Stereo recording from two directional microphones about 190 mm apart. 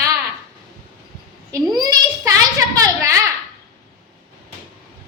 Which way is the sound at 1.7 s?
20° right (ahead or behind).